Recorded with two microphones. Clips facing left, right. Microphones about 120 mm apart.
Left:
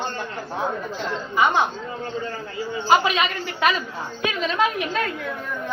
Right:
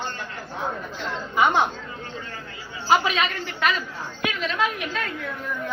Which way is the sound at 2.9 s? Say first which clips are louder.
Left 2 dB; 5° left (ahead or behind).